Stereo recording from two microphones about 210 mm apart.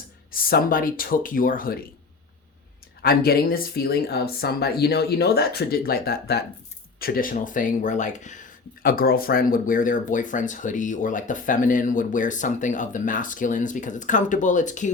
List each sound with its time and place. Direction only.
0.3 s speech: 45° left (ahead or behind)
3.0 s speech: 45° left (ahead or behind)